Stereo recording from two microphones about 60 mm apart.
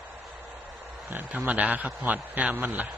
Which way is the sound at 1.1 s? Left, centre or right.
Right.